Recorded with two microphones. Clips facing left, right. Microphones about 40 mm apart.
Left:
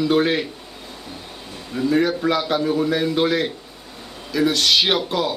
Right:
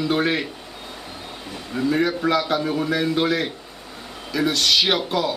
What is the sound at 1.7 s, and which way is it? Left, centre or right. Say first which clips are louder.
Speech: left 2 dB; centre.